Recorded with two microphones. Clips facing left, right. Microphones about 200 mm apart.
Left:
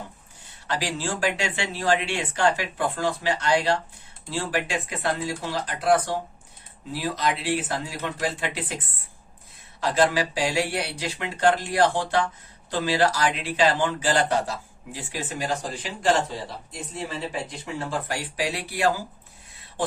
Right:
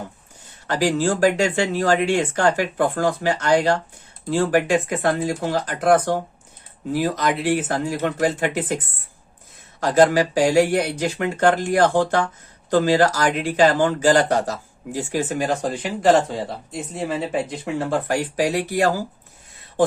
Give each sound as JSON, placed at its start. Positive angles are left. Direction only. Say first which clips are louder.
{"t": 0.7, "sound": "speech", "louder": "right 9 dB", "side_deg": -45}
{"t": 9.8, "sound": "speech", "louder": "right 6 dB", "side_deg": -45}
{"t": 16.9, "sound": "speech", "louder": "right 7 dB", "side_deg": -60}